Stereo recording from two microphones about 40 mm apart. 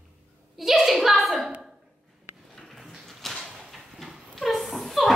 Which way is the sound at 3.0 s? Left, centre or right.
Centre.